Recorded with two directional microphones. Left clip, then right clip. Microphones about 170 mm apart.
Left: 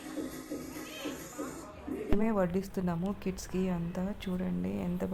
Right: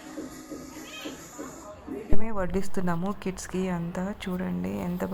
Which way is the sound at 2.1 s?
15° right (ahead or behind).